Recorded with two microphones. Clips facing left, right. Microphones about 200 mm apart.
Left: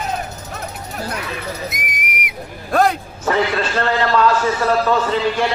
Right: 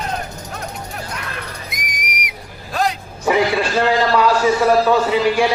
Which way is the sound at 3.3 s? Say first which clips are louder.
Right 2 dB; 10° right (ahead or behind).